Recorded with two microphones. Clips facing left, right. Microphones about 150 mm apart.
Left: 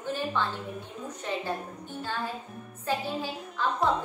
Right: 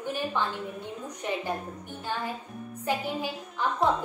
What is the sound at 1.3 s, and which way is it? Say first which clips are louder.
Speech: right 1 dB; 15° right (ahead or behind).